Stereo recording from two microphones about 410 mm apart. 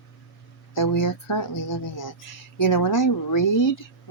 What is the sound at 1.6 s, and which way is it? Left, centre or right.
Speech, left.